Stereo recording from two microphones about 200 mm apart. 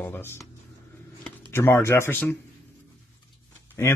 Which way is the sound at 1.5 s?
10° left (ahead or behind).